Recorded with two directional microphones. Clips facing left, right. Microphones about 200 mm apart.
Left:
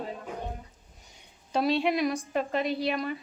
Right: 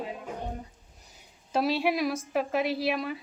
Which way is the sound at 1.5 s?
5° right (ahead or behind).